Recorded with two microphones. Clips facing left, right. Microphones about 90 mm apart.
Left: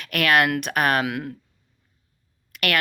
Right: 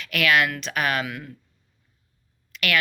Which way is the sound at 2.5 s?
55° left (ahead or behind).